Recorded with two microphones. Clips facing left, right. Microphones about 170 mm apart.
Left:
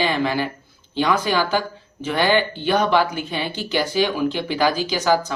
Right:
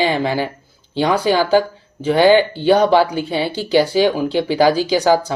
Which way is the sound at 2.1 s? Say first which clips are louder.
Right 7 dB; 15° right (ahead or behind).